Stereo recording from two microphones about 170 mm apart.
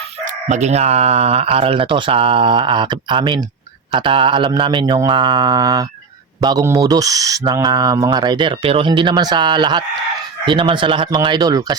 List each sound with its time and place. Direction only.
0.3 s speech: 40° right (ahead or behind); by 11.8 s 25° right (ahead or behind)